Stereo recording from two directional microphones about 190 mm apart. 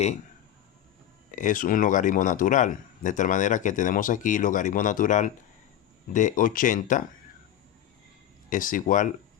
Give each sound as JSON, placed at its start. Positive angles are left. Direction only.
{"t": 1.4, "sound": "speech", "side_deg": 45}
{"t": 8.4, "sound": "speech", "side_deg": 45}